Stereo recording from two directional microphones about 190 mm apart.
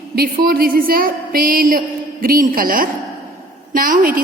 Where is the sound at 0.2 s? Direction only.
50° right (ahead or behind).